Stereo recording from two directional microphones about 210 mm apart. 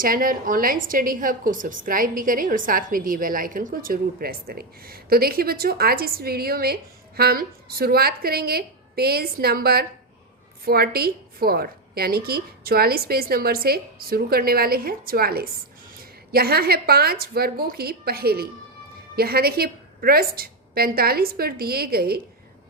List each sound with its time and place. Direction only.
0.0 s a woman's voice: 40° right (ahead or behind)